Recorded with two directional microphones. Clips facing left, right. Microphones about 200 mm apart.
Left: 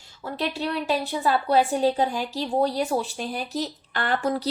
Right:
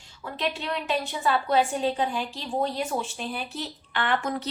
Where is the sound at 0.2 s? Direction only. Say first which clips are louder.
Left 3 dB; 40° left (ahead or behind).